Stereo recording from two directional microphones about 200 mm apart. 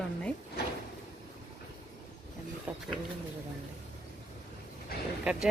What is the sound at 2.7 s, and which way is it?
Speech, 10° right (ahead or behind).